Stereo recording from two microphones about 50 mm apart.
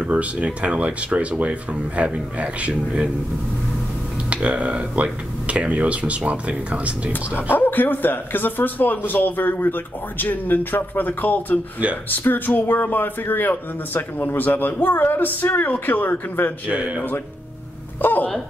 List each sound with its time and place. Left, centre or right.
0.0 s speech: right
4.3 s speech: right
7.1 s speech: left
16.7 s speech: right
18.0 s speech: left